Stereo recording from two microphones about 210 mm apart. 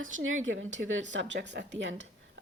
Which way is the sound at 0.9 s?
60° right (ahead or behind).